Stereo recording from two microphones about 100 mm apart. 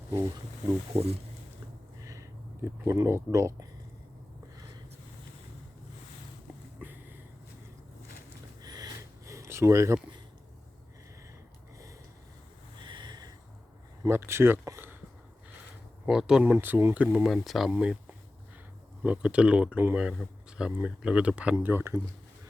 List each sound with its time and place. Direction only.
0.9 s speech: 90° right
2.0 s speech: 30° right (ahead or behind)
6.7 s a sound: 20° right (ahead or behind)
8.6 s a sound: 40° right (ahead or behind)
12.8 s a sound: 50° right (ahead or behind)
14.1 s speech: 25° right (ahead or behind)
16.0 s speech: 5° right (ahead or behind)
16.4 s speech: 20° right (ahead or behind)
17.2 s speech: centre (ahead or behind)
19.0 s speech: 10° right (ahead or behind)